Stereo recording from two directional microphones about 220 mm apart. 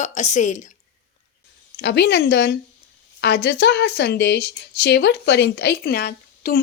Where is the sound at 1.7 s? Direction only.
50° left (ahead or behind).